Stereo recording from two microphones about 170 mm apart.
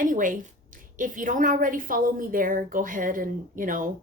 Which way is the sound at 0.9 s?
50° right (ahead or behind).